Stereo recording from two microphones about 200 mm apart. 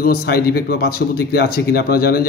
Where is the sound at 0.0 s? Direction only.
50° left (ahead or behind).